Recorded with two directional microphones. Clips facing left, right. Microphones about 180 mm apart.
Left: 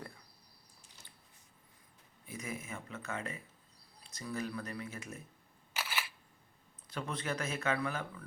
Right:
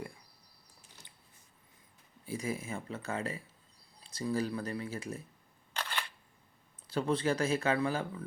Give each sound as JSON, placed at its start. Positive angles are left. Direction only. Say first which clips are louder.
{"t": 2.2, "sound": "speech", "louder": "right 6 dB", "side_deg": -30}
{"t": 5.7, "sound": "camera", "louder": "right 1 dB", "side_deg": 5}
{"t": 6.8, "sound": "speech", "louder": "right 8 dB", "side_deg": -30}